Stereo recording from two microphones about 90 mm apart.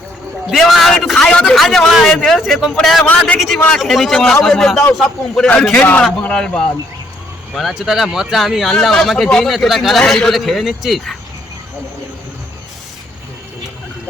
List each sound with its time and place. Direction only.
0.4 s a man's voice: centre (ahead or behind)
3.8 s a man's voice: centre (ahead or behind)